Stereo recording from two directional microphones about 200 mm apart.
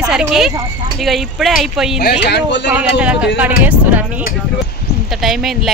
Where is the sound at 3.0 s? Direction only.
5° right (ahead or behind).